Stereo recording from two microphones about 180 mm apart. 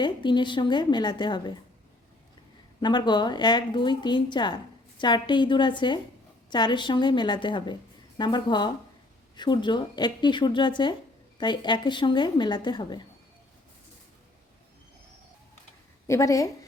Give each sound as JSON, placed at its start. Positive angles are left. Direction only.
{"t": 0.0, "sound": "a woman's voice", "side_deg": 25}
{"t": 2.8, "sound": "a woman's voice", "side_deg": 25}
{"t": 16.0, "sound": "a woman's voice", "side_deg": 15}